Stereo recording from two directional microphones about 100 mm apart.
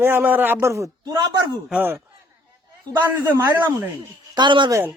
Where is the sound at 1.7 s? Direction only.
20° right (ahead or behind).